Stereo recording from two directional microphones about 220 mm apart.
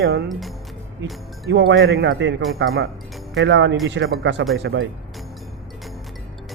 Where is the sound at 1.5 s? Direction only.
50° right (ahead or behind).